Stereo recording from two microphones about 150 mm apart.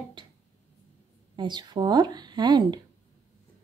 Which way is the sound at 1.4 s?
30° right (ahead or behind).